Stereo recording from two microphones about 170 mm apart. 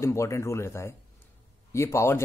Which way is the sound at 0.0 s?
15° left (ahead or behind).